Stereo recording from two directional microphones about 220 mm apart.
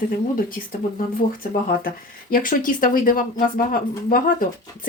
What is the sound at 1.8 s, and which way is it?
Speech, 40° left (ahead or behind).